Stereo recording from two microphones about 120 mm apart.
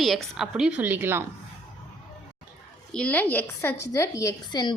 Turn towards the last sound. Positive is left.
turn(degrees=35)  # may be behind; listen again after turning